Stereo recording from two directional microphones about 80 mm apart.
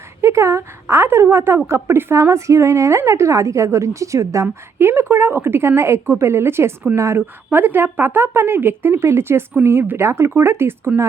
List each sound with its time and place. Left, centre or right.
0.2 s a woman's voice: right
7.2 s a woman's voice: right